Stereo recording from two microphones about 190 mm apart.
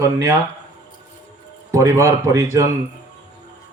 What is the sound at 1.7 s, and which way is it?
Speech, 15° right (ahead or behind).